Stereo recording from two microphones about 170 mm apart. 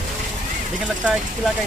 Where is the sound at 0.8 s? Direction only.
5° right (ahead or behind).